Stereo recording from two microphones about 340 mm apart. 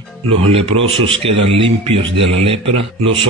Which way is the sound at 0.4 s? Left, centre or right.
Centre.